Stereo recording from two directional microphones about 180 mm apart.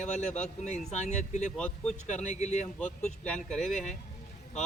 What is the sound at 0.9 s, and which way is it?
Speech, 40° left (ahead or behind).